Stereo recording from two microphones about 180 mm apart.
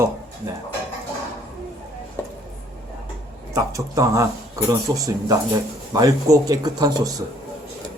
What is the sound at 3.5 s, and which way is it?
Speech, 15° right (ahead or behind).